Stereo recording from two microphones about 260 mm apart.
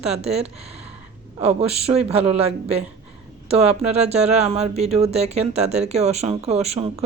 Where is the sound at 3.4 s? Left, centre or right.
Right.